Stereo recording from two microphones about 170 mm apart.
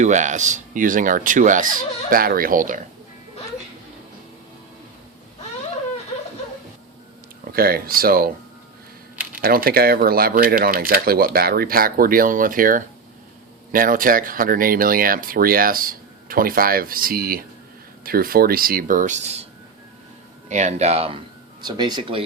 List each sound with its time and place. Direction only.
0.0 s speech: 45° right (ahead or behind)
7.5 s speech: 60° right (ahead or behind)
9.4 s speech: 60° right (ahead or behind); by 19.5 s 40° right (ahead or behind)
20.5 s speech: 45° right (ahead or behind)
21.6 s speech: 25° right (ahead or behind)